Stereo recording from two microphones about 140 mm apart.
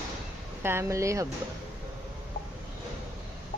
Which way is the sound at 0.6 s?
20° right (ahead or behind).